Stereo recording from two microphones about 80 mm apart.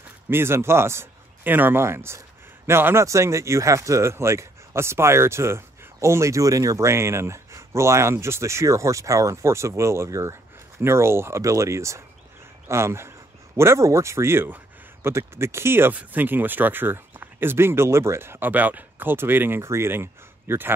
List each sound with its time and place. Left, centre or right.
0.3 s speech: right